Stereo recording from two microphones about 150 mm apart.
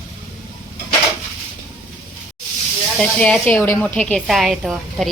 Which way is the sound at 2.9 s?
5° left (ahead or behind).